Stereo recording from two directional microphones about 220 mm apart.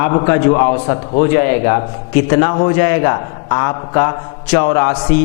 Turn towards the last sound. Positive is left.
turn(degrees=15)  # may be behind; listen again after turning